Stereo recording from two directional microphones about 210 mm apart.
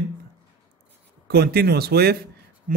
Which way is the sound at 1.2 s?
50° right (ahead or behind).